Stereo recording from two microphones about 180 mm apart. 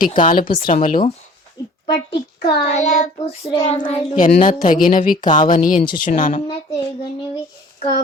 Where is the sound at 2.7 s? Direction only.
40° left (ahead or behind).